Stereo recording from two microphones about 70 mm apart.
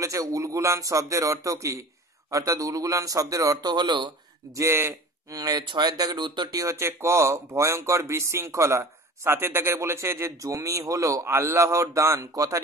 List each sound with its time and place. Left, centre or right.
0.0 s speech: right
3.6 s speech: right
4.6 s speech: right
5.3 s speech: right
6.6 s speech: right
11.2 s speech: right